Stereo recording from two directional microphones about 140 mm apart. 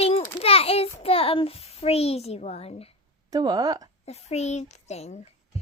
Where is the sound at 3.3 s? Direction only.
30° right (ahead or behind).